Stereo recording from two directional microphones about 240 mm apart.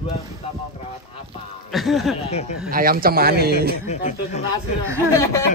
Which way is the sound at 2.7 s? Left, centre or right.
Right.